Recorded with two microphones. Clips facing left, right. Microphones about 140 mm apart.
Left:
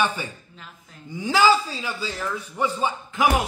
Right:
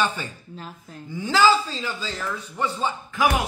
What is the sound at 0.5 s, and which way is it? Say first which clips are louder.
Speech: right 8 dB; 40° right (ahead or behind).